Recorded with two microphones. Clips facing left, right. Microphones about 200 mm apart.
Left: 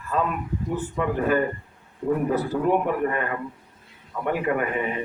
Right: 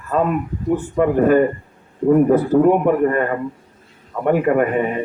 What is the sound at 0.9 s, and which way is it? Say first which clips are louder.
A man's voice: right 9 dB; 50° right (ahead or behind).